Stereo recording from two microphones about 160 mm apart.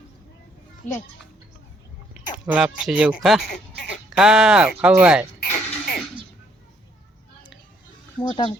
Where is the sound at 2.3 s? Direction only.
5° right (ahead or behind).